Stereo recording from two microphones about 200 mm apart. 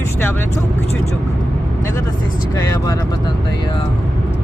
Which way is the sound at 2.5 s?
15° left (ahead or behind).